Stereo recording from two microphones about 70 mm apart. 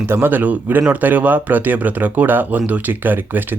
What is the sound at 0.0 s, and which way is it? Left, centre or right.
Speech, right.